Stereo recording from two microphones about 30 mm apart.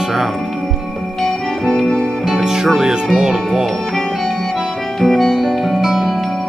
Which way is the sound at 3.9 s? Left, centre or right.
Centre.